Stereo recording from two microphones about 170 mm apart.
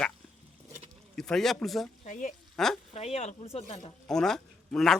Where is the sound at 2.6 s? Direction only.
Centre (ahead or behind).